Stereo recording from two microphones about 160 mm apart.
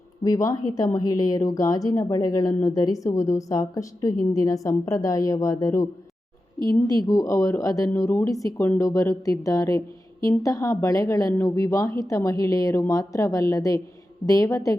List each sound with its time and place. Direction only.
0.2 s a woman's voice: 20° left (ahead or behind)